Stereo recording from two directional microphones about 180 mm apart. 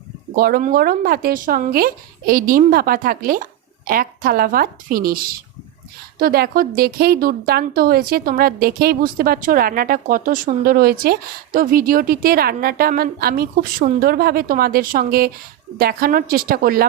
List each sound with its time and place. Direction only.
0.3 s a woman's voice: 55° right (ahead or behind)